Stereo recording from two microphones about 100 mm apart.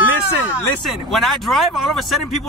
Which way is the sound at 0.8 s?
Centre (ahead or behind).